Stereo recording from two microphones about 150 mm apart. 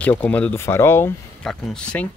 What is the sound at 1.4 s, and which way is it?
Speech, 5° left (ahead or behind).